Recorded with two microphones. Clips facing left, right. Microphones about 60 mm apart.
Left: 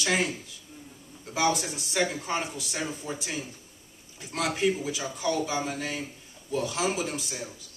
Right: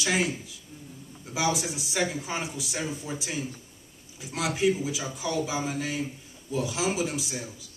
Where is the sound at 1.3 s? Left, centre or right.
Centre.